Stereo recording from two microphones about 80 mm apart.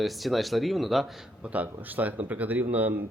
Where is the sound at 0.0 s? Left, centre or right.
Centre.